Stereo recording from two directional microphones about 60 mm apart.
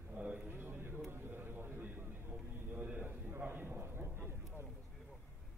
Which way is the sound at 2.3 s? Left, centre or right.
Right.